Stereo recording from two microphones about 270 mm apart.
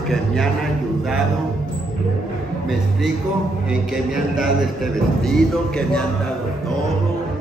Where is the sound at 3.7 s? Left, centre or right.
Centre.